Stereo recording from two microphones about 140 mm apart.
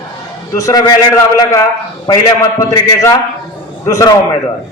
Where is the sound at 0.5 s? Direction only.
25° left (ahead or behind).